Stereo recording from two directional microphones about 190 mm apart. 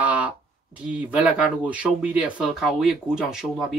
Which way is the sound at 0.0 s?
10° right (ahead or behind).